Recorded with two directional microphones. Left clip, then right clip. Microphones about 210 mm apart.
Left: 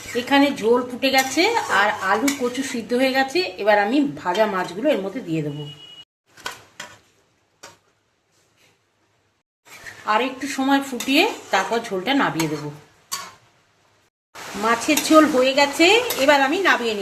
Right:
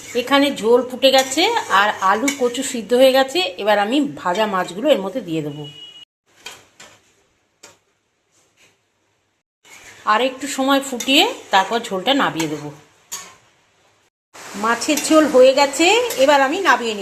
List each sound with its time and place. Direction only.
0.3 s speech: 10° right (ahead or behind)
10.0 s speech: 10° right (ahead or behind)
14.8 s speech: 10° right (ahead or behind)